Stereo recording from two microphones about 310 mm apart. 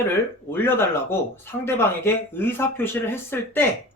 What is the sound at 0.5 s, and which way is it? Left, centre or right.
Speech, centre.